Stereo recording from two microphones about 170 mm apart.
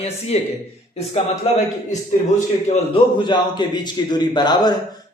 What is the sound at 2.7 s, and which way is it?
Speech, 40° left (ahead or behind).